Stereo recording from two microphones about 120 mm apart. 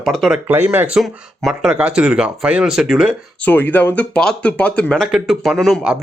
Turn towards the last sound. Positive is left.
turn(degrees=0)  # may be behind; listen again after turning